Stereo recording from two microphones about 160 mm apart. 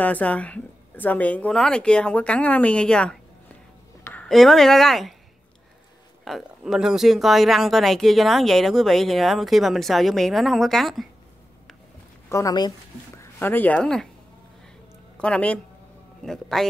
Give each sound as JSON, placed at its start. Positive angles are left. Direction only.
{"t": 0.0, "sound": "a woman's voice", "side_deg": 10}
{"t": 6.2, "sound": "speech", "side_deg": 0}
{"t": 12.3, "sound": "speech", "side_deg": 20}
{"t": 13.2, "sound": "speech", "side_deg": 10}
{"t": 15.1, "sound": "speech", "side_deg": 5}